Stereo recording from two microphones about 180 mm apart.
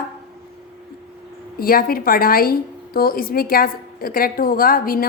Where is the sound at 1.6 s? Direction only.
55° left (ahead or behind).